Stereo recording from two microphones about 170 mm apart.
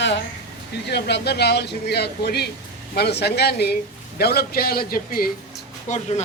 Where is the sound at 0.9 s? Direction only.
80° left; by 5.3 s 60° left (ahead or behind).